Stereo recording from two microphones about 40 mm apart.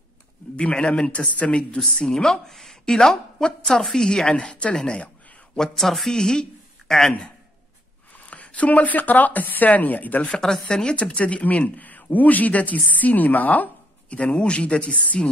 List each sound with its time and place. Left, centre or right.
0.6 s a woman's voice: left
5.6 s a woman's voice: centre
8.3 s speech: left
10.4 s speech: centre; by 13.7 s left
14.1 s speech: left